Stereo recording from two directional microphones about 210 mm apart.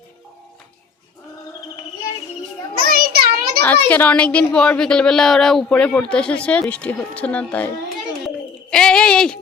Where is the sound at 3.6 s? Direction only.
10° left (ahead or behind).